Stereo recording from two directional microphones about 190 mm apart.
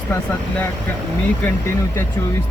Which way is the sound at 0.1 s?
10° left (ahead or behind).